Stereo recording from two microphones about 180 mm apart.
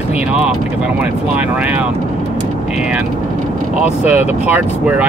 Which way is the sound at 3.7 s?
5° right (ahead or behind).